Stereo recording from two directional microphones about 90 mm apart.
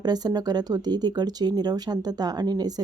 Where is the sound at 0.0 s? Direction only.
50° right (ahead or behind).